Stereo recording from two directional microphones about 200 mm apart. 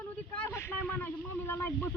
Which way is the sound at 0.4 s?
10° left (ahead or behind).